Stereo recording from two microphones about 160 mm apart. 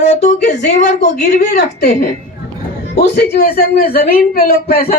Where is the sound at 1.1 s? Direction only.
70° left (ahead or behind).